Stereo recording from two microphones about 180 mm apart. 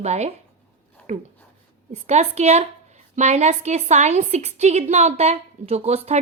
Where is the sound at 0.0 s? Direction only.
40° right (ahead or behind).